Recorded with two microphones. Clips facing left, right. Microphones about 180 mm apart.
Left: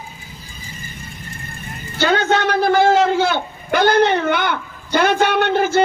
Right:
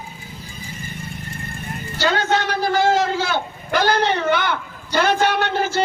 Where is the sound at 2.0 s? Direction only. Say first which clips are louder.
Left 3 dB; 55° left (ahead or behind).